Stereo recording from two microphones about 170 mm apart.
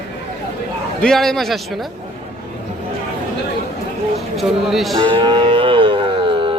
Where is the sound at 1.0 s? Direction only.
5° left (ahead or behind).